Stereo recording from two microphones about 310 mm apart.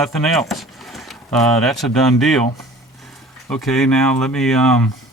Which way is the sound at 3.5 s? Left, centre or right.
Centre.